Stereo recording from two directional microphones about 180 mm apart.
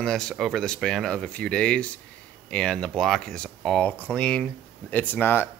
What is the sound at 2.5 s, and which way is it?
Speech, 5° left (ahead or behind).